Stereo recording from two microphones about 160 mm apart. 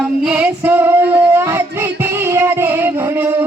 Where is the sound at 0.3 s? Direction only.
10° right (ahead or behind).